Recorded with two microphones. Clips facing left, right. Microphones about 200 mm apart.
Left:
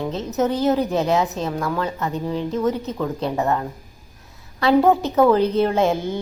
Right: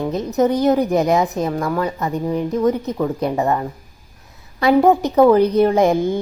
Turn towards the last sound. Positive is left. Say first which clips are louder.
# right 4 dB
turn(degrees=-15)  # may be behind; listen again after turning